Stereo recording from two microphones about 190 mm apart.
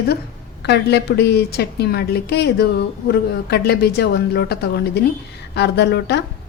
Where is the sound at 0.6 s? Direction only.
60° left (ahead or behind).